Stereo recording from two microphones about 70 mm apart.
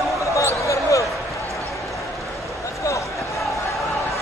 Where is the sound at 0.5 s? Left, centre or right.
Left.